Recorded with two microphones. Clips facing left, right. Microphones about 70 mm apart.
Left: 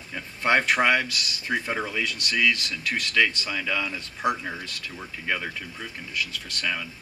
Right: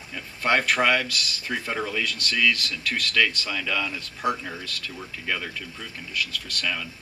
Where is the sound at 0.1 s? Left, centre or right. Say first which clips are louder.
Left 1 dB; left.